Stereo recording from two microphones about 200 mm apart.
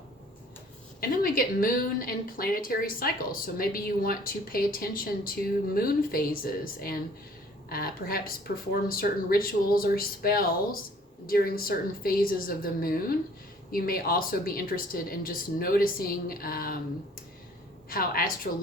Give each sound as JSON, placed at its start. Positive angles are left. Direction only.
{"t": 1.2, "sound": "a woman's voice", "side_deg": 45}
{"t": 17.8, "sound": "a woman's voice", "side_deg": 45}